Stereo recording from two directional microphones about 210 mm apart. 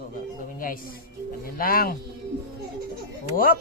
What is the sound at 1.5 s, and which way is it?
Speech, 45° left (ahead or behind).